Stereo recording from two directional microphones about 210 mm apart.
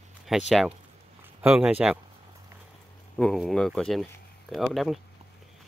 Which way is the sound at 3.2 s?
Centre (ahead or behind).